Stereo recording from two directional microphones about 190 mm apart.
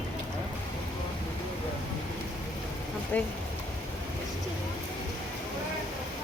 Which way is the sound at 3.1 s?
10° left (ahead or behind).